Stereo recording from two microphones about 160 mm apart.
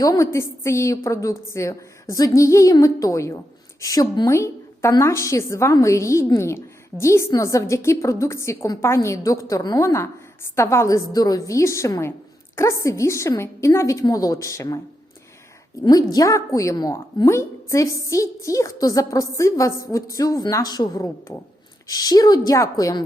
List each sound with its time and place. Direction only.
0.0 s a woman's voice: 20° left (ahead or behind)
15.8 s a woman's voice: 25° left (ahead or behind)